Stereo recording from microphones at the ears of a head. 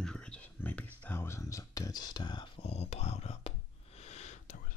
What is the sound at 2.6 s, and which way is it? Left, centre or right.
Whispering, left.